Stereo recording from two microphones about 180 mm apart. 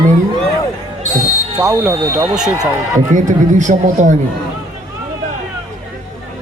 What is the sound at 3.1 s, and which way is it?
Speech, 45° right (ahead or behind).